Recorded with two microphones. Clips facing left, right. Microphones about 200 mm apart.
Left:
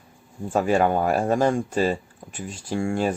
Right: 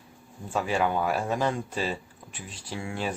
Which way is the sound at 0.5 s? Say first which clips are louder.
Left 6 dB; 45° left (ahead or behind).